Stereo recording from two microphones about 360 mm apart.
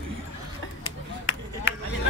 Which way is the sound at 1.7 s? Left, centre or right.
Left.